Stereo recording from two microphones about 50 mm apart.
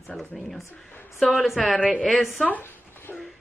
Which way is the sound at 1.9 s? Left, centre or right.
Centre.